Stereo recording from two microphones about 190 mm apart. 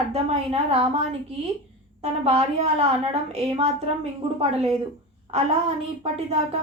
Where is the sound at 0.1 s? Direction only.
35° right (ahead or behind).